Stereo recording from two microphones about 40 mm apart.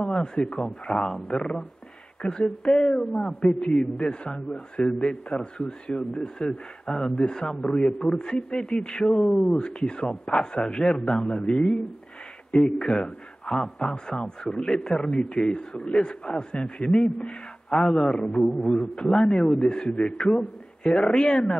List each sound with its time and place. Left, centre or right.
0.0 s a man's voice: centre
2.2 s a man's voice: left
9.0 s a man's voice: centre
9.4 s a man's voice: left
19.7 s a man's voice: left